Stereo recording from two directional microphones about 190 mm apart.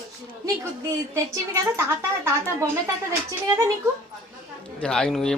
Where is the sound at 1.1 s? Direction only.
15° right (ahead or behind).